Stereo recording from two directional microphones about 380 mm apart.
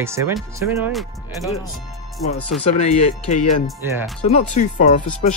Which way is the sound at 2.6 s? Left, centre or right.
Centre.